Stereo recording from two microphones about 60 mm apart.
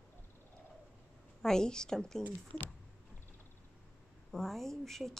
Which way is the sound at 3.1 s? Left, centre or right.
Left.